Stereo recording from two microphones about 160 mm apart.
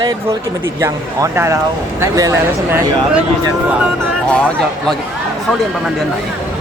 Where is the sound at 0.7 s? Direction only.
20° right (ahead or behind).